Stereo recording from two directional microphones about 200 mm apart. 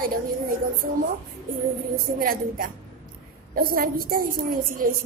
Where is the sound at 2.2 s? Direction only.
45° right (ahead or behind).